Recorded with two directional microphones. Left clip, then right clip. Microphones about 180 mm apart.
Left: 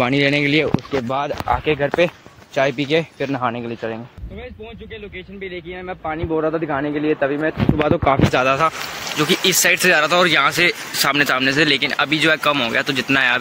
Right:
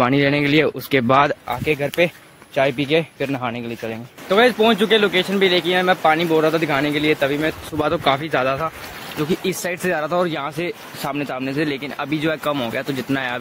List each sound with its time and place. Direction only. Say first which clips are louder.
0.0 s speech: even; 5° right (ahead or behind)
1.0 s speech: right 7 dB; 40° right (ahead or behind)
1.5 s speech: left 3 dB; 10° right (ahead or behind)
4.8 s speech: right 18 dB; 45° right (ahead or behind)
6.3 s speech: right 3 dB; 20° right (ahead or behind)
7.8 s speech: left 1 dB; 5° right (ahead or behind)
8.3 s speech: left 4 dB; 10° left (ahead or behind)
9.3 s speech: left 9 dB; 5° right (ahead or behind)